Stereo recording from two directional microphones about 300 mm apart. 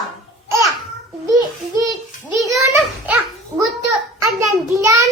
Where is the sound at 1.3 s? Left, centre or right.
Centre.